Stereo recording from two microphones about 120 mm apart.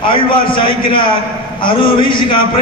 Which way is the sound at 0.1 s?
45° left (ahead or behind).